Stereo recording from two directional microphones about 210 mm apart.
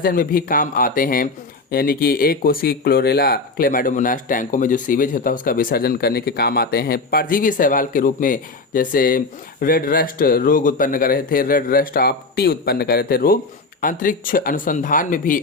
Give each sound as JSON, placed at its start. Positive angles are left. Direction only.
{"t": 0.0, "sound": "speech", "side_deg": 40}